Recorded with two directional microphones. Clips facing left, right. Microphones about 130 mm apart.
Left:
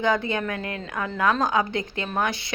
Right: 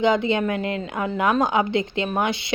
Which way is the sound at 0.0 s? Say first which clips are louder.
Right 4 dB; 20° right (ahead or behind).